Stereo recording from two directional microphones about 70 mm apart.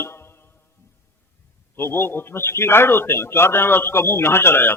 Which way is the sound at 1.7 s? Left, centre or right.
Left.